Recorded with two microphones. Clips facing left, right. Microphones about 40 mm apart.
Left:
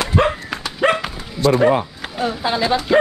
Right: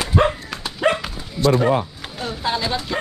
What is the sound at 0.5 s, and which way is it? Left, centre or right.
Dog, left.